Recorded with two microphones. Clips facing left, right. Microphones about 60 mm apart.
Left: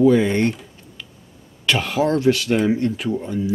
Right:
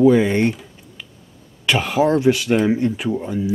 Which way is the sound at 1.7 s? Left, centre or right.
Centre.